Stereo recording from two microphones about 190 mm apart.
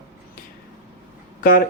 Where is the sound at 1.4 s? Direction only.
45° left (ahead or behind).